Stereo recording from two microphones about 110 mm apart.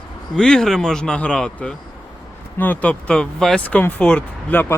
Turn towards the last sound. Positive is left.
turn(degrees=10)  # may be behind; listen again after turning